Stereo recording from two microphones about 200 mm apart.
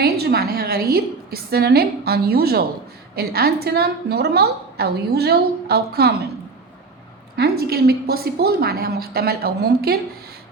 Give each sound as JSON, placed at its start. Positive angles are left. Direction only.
{"t": 0.0, "sound": "a woman's voice", "side_deg": -50}
{"t": 7.7, "sound": "a woman's voice", "side_deg": -50}